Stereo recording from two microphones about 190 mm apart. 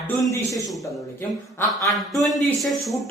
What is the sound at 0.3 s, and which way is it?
Speech, 15° left (ahead or behind).